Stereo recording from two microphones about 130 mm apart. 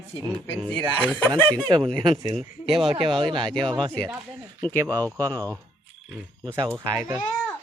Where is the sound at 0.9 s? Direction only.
10° right (ahead or behind).